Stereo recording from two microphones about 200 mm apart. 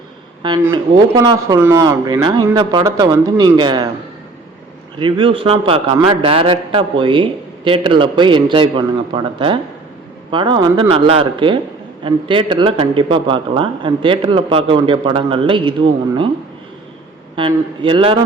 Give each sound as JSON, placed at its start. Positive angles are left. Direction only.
{"t": 0.7, "sound": "a man's voice", "side_deg": -20}
{"t": 4.9, "sound": "a man's voice", "side_deg": -25}
{"t": 17.3, "sound": "a man's voice", "side_deg": -25}